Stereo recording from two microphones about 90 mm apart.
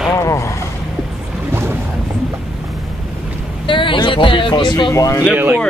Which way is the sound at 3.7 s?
70° left (ahead or behind).